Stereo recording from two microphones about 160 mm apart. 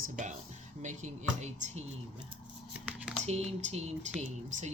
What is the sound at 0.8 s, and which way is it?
Speech, 50° right (ahead or behind).